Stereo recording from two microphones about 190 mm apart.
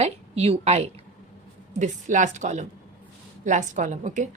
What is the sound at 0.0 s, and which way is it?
A woman's voice, 35° right (ahead or behind).